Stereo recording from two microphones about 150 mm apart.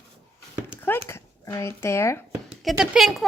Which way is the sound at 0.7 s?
15° left (ahead or behind).